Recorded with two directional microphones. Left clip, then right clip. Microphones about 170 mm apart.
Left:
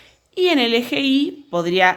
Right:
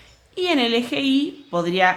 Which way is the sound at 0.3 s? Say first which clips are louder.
Left 3 dB; 30° left (ahead or behind).